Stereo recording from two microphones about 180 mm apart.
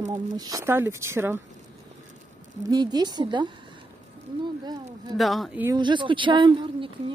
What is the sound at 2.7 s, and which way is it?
Speech, 20° right (ahead or behind).